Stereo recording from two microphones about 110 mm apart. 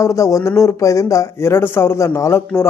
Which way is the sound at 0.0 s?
30° left (ahead or behind).